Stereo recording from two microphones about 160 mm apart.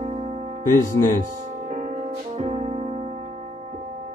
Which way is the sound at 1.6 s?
50° right (ahead or behind).